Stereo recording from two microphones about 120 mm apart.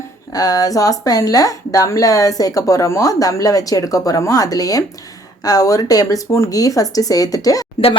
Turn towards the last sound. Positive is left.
turn(degrees=30)  # may be behind; listen again after turning